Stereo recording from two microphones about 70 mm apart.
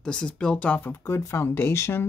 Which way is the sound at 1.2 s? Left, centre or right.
Left.